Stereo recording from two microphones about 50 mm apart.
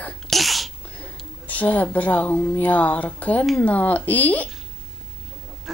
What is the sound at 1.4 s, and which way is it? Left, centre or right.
Speech, left.